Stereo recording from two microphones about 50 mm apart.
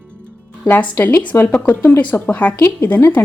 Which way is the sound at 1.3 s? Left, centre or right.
Left.